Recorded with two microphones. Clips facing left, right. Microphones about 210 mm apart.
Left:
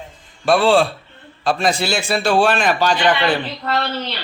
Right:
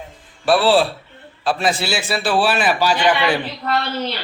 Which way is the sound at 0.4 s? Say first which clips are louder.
Left 1 dB; 5° right (ahead or behind).